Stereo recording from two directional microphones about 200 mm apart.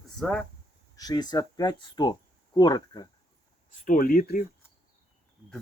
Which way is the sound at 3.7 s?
40° left (ahead or behind).